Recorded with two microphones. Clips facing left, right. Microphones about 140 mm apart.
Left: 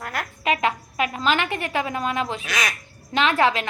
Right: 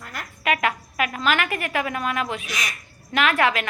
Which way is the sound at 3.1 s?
30° left (ahead or behind).